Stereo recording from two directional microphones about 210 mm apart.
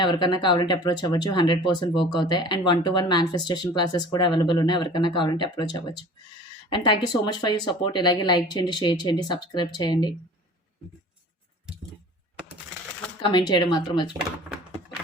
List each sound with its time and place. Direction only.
0.0 s speech: 20° left (ahead or behind)
13.3 s speech: 20° left (ahead or behind)